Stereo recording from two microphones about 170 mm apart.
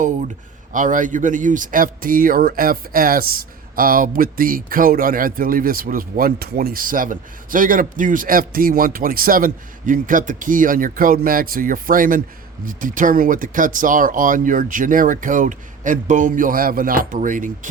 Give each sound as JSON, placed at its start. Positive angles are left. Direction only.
{"t": 0.7, "sound": "speech", "side_deg": -50}